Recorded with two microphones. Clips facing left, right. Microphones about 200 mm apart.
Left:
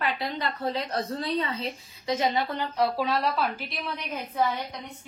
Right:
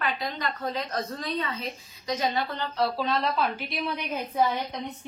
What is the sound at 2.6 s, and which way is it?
Speech, 15° left (ahead or behind).